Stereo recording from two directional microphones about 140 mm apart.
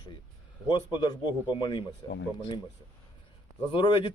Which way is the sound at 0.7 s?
30° left (ahead or behind).